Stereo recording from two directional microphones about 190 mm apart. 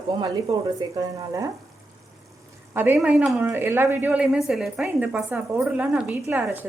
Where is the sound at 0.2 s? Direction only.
20° right (ahead or behind).